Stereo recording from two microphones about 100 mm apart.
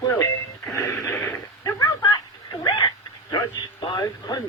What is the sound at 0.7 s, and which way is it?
Wheeze, 30° left (ahead or behind).